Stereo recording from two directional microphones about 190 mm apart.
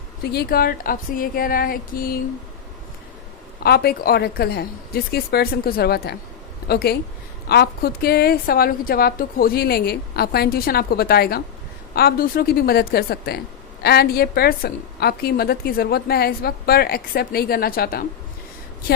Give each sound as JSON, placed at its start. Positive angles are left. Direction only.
{"t": 0.2, "sound": "a woman's voice", "side_deg": 55}
{"t": 3.6, "sound": "a woman's voice", "side_deg": 55}